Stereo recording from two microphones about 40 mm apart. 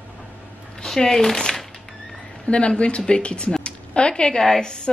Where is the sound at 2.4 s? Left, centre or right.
Left.